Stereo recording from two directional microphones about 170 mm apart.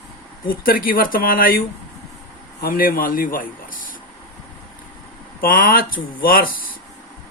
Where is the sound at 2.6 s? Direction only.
55° left (ahead or behind).